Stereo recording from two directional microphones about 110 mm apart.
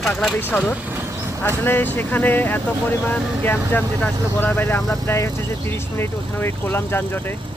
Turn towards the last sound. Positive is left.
turn(degrees=20)  # may be behind; listen again after turning